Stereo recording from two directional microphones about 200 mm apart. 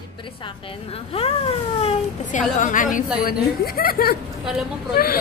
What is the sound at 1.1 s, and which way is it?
A woman's voice, 30° left (ahead or behind).